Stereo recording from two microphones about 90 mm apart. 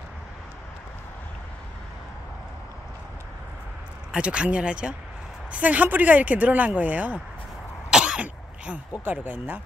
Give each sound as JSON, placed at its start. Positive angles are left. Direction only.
{"t": 4.1, "sound": "speech", "side_deg": -10}
{"t": 7.9, "sound": "throat clearing", "side_deg": -10}
{"t": 9.0, "sound": "speech", "side_deg": -20}